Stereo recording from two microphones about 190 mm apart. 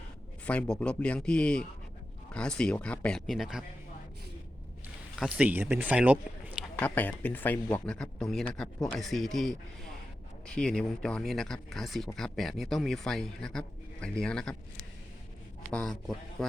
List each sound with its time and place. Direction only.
0.4 s speech: 5° left (ahead or behind)
5.1 s speech: 5° right (ahead or behind)
6.7 s speech: 10° left (ahead or behind)
15.7 s speech: centre (ahead or behind)